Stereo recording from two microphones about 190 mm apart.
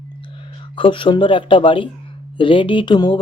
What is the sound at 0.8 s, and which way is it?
Speech, 25° left (ahead or behind).